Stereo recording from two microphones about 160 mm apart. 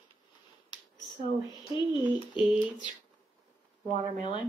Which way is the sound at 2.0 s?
10° right (ahead or behind).